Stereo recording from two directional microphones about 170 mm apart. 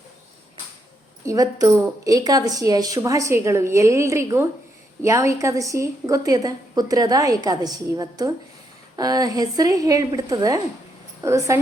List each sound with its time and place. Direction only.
1.2 s a woman's voice: 20° right (ahead or behind)